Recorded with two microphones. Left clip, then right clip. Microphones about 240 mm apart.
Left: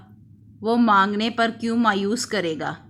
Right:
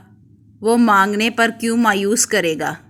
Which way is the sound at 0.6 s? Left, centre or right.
Centre.